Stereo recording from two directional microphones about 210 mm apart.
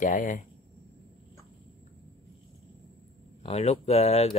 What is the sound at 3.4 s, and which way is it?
Speech, 30° left (ahead or behind).